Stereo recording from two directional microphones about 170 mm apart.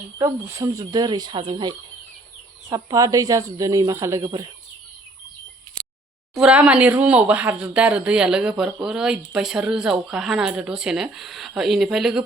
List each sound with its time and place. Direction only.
0.2 s speech: 20° right (ahead or behind)
6.3 s speech: 5° right (ahead or behind)